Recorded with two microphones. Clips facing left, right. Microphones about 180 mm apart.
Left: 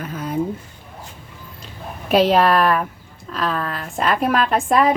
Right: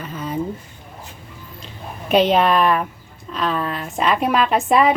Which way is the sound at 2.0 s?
Centre (ahead or behind).